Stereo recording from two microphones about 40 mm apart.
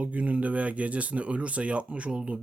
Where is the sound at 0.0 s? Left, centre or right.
Right.